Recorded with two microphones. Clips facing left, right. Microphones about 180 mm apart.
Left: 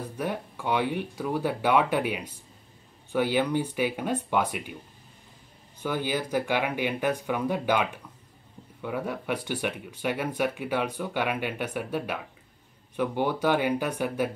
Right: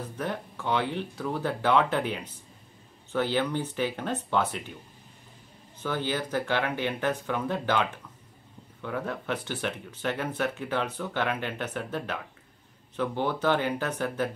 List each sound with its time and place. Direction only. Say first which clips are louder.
0.2 s speech: left 2 dB; 10° left (ahead or behind)
5.8 s speech: left 1 dB; 10° left (ahead or behind)